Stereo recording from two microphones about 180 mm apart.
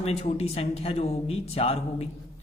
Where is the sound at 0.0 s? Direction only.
35° left (ahead or behind).